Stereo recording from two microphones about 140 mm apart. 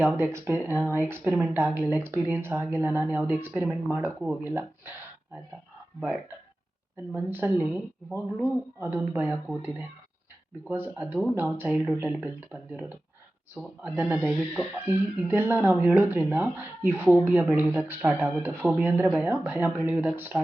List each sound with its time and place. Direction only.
0.0 s speech: 15° right (ahead or behind)
7.1 s speech: 15° right (ahead or behind)
10.7 s speech: 15° right (ahead or behind)